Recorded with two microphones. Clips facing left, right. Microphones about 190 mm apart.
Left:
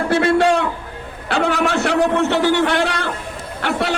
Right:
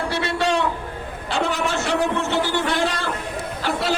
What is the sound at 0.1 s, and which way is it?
A man's voice, 50° left (ahead or behind).